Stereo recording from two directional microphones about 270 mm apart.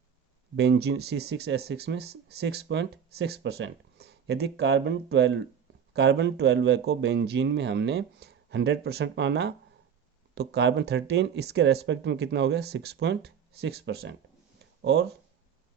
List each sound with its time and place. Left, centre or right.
0.5 s speech: right